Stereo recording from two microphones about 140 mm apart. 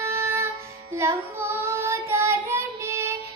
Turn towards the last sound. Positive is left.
turn(degrees=-20)  # may be behind; listen again after turning